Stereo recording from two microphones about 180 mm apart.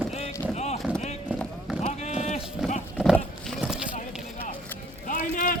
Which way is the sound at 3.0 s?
Centre (ahead or behind).